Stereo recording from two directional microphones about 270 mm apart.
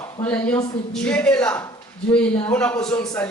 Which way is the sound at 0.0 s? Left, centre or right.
Centre.